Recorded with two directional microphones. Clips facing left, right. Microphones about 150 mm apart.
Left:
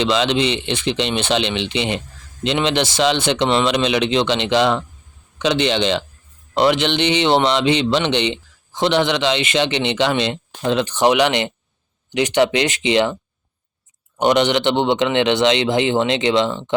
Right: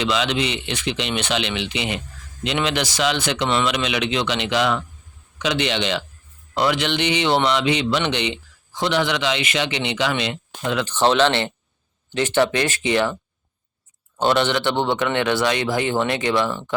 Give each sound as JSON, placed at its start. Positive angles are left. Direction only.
{"t": 0.0, "sound": "a man's voice", "side_deg": 30}
{"t": 10.8, "sound": "a man's voice", "side_deg": 15}
{"t": 14.2, "sound": "a man's voice", "side_deg": 15}